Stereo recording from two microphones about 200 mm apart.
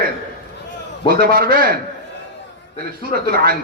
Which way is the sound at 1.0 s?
50° right (ahead or behind).